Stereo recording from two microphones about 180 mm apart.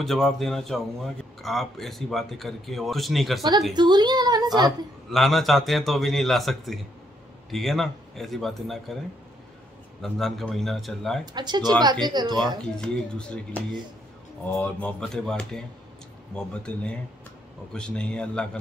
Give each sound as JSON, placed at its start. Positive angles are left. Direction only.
{"t": 0.0, "sound": "speech", "side_deg": 0}
{"t": 3.7, "sound": "a woman's voice", "side_deg": -25}
{"t": 4.6, "sound": "speech", "side_deg": 0}
{"t": 10.0, "sound": "speech", "side_deg": 0}
{"t": 11.3, "sound": "a woman's voice", "side_deg": -25}
{"t": 12.6, "sound": "speech", "side_deg": 5}